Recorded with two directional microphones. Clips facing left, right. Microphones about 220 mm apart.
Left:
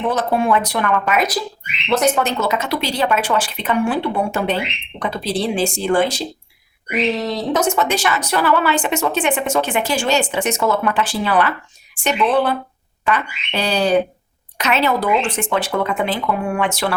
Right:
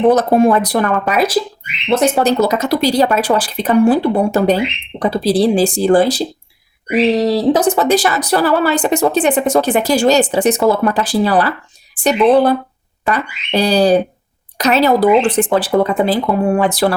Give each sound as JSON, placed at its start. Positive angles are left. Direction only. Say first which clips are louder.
{"t": 0.0, "sound": "speech", "louder": "right 8 dB", "side_deg": -40}